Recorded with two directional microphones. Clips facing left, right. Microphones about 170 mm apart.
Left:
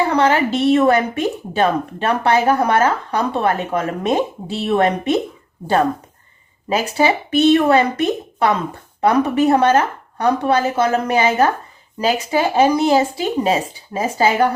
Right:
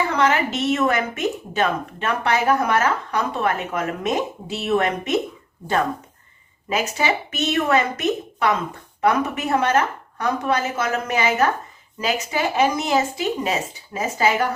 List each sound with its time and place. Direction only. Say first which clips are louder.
0.1 s speech: left 4 dB; 35° left (ahead or behind)
6.7 s speech: left 5 dB; 30° left (ahead or behind)